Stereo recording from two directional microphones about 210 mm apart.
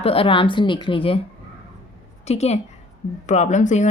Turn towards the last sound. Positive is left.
turn(degrees=35)  # may be behind; listen again after turning